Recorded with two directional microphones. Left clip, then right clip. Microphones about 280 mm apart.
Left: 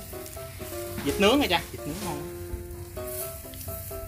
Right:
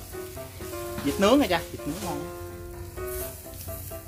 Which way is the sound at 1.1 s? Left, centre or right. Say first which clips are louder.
Right 1 dB; centre.